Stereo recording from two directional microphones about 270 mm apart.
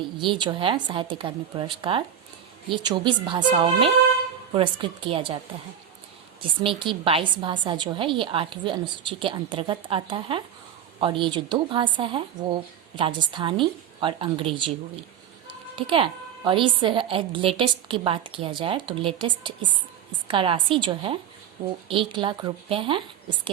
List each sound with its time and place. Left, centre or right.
0.0 s a woman's voice: centre
6.4 s a woman's voice: centre